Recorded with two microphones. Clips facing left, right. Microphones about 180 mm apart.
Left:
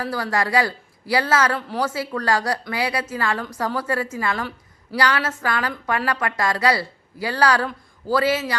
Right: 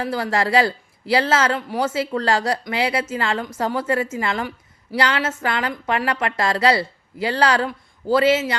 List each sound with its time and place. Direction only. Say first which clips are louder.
0.0 s speech: right 2 dB; 25° right (ahead or behind)